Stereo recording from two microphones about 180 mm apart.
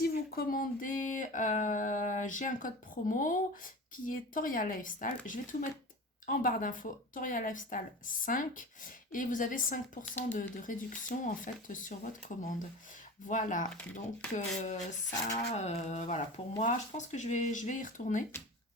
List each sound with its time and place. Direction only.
0.0 s speech: 55° left (ahead or behind)